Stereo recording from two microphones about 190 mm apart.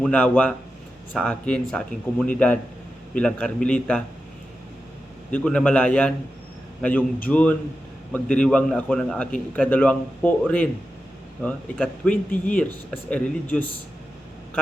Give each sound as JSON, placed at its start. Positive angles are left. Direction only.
{"t": 0.0, "sound": "a man's voice", "side_deg": 5}
{"t": 5.3, "sound": "a man's voice", "side_deg": 5}